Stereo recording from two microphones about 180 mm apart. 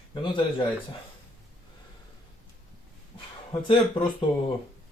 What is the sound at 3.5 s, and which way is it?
Speech, 30° left (ahead or behind).